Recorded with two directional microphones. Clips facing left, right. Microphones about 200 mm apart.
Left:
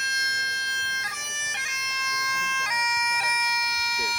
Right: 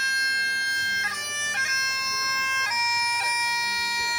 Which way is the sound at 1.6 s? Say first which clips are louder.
Right 1 dB; centre (ahead or behind).